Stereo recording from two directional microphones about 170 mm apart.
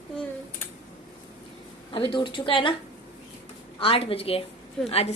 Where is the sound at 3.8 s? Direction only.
35° left (ahead or behind).